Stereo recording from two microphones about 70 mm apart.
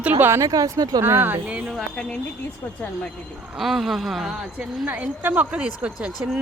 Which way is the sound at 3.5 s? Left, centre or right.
Centre.